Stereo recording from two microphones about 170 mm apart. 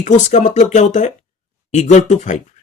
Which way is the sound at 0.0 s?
45° left (ahead or behind).